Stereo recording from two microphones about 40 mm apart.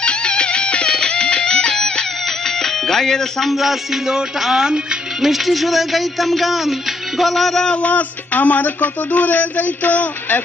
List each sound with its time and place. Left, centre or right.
0.0 s music: left
3.5 s music: centre
4.6 s speech: centre
5.2 s music: centre
7.6 s a sound: left
7.9 s speech: left